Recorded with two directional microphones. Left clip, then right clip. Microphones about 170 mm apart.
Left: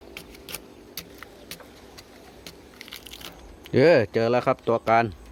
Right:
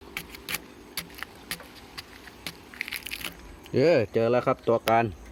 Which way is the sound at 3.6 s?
30° left (ahead or behind).